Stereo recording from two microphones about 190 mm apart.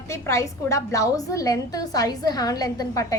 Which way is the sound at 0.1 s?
15° left (ahead or behind).